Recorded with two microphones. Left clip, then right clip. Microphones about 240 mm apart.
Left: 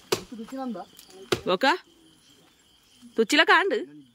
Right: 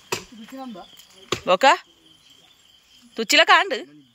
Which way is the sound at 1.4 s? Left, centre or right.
Centre.